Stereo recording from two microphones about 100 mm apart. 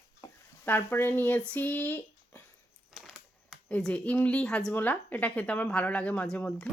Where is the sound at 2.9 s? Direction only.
5° right (ahead or behind).